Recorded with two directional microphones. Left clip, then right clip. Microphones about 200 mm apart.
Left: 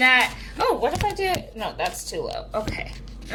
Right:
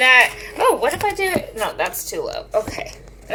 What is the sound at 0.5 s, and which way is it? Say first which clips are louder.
A woman's voice: right 5 dB; 10° right (ahead or behind).